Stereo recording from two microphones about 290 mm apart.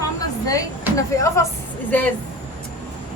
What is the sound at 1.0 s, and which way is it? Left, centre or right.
Speech, centre.